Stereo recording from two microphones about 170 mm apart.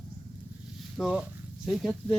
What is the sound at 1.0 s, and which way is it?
Speech, centre (ahead or behind).